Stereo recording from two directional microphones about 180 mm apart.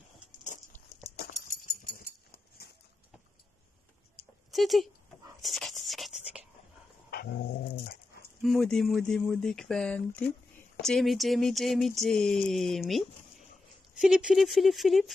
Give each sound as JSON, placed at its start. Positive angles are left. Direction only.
{"t": 1.5, "sound": "dog", "side_deg": 55}
{"t": 4.5, "sound": "speech", "side_deg": 0}
{"t": 5.4, "sound": "a sound", "side_deg": 0}
{"t": 7.7, "sound": "dog", "side_deg": 60}
{"t": 8.4, "sound": "speech", "side_deg": 0}